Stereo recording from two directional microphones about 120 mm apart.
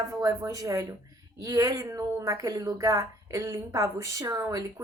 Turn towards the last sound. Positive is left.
turn(degrees=-25)  # may be behind; listen again after turning